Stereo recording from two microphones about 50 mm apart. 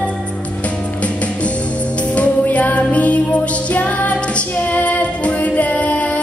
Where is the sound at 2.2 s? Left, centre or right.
Left.